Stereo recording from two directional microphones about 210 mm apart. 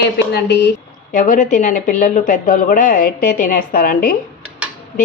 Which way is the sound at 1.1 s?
40° left (ahead or behind).